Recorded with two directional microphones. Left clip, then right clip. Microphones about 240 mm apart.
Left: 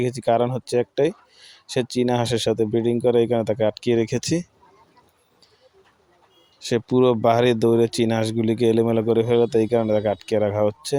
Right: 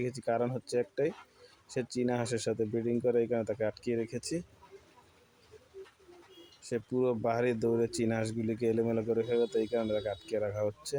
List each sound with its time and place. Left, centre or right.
0.0 s speech: left
6.6 s speech: left